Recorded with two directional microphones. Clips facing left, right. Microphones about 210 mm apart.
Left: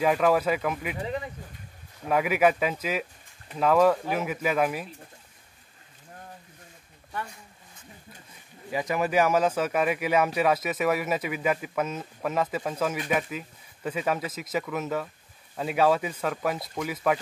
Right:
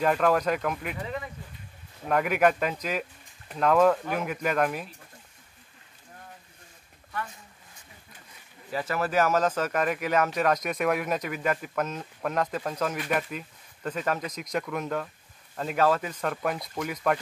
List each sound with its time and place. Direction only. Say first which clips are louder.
0.0 s speech: left 1 dB; 5° left (ahead or behind)
1.0 s speech: left 3 dB; 25° left (ahead or behind)
2.0 s speech: left 1 dB; 5° left (ahead or behind)
8.7 s speech: left 2 dB; 15° left (ahead or behind)